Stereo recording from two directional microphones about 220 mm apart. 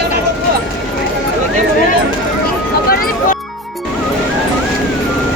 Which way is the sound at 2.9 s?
40° left (ahead or behind).